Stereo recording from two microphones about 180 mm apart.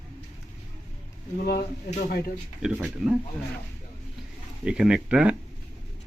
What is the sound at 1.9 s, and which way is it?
Speech, 50° left (ahead or behind).